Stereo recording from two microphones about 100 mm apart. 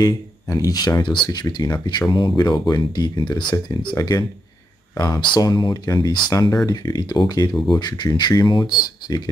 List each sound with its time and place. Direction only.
0.0 s speech: 40° left (ahead or behind)
3.9 s speech: 35° left (ahead or behind)